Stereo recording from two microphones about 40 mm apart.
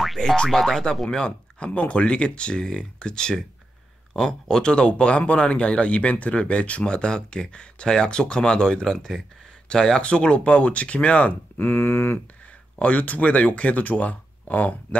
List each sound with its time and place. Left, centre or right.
0.5 s speech: centre
1.1 s speech: left
11.5 s a sound: left
12.7 s speech: left